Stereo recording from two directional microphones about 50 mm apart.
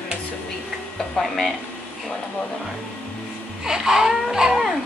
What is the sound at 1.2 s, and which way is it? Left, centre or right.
Speech, centre.